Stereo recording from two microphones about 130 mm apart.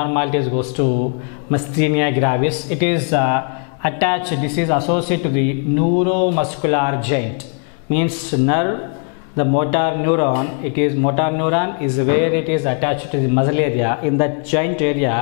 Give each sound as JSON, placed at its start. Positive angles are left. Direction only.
{"t": 0.0, "sound": "a man's voice", "side_deg": 5}